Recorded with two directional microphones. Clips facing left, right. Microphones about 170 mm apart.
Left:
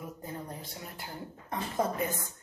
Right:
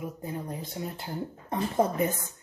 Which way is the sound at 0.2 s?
15° right (ahead or behind).